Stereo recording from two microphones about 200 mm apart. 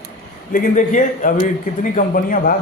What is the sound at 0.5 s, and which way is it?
A man's voice, 40° left (ahead or behind).